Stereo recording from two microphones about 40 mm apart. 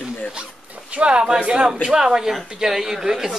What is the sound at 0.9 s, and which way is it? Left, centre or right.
Speech, right.